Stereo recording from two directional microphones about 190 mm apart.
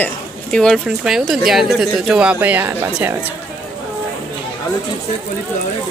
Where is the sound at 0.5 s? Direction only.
5° left (ahead or behind); by 3.3 s 10° right (ahead or behind).